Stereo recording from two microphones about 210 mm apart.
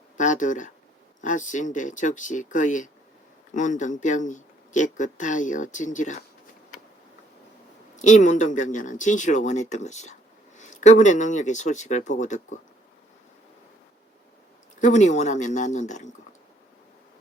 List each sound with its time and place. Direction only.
0.2 s speech: 35° left (ahead or behind)
7.9 s speech: 35° left (ahead or behind)
14.8 s speech: 35° left (ahead or behind)